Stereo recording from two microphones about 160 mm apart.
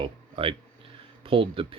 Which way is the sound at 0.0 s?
35° right (ahead or behind).